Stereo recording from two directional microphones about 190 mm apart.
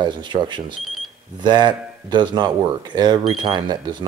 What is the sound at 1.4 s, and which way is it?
Speech, 25° right (ahead or behind).